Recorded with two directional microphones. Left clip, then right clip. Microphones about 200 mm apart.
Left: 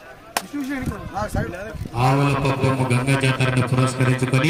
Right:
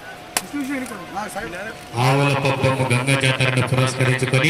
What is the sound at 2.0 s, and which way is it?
A man's voice, 60° left (ahead or behind).